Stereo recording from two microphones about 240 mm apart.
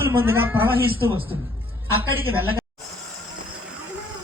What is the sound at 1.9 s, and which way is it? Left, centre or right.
Speech, centre.